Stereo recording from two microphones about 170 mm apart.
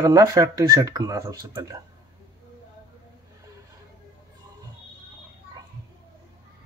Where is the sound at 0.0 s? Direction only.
20° right (ahead or behind).